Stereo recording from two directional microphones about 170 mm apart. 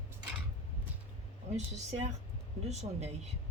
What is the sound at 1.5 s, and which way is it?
Speech, 40° right (ahead or behind).